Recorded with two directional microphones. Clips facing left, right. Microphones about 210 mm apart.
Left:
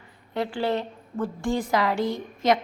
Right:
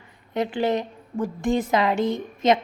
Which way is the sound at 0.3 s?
20° right (ahead or behind).